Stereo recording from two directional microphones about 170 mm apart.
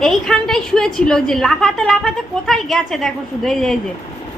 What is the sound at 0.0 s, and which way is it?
A woman's voice, centre (ahead or behind).